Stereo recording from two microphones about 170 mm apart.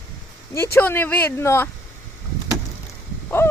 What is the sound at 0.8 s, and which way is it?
Speech, 10° left (ahead or behind).